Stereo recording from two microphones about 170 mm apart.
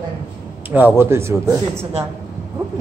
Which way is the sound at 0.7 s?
10° right (ahead or behind).